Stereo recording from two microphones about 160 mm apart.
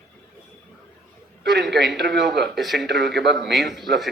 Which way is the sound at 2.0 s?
85° right.